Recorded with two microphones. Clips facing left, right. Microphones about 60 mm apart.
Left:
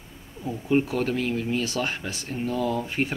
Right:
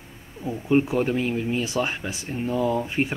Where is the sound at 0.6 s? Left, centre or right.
Centre.